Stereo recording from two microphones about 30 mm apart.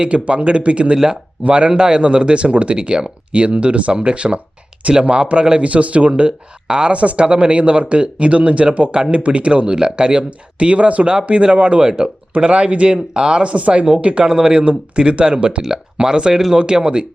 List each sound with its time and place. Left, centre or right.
0.0 s speech: right
0.9 s speech: right
1.5 s speech: right
5.6 s speech: right
6.7 s speech: right
6.9 s speech: right
13.1 s speech: right
13.4 s speech: right
14.3 s speech: right
14.6 s speech: right
16.3 s speech: centre
16.6 s speech: right